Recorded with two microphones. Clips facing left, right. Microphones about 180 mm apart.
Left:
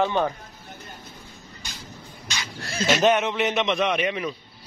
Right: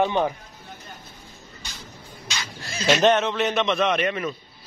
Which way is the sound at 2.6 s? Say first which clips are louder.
Left 5 dB; 60° left (ahead or behind).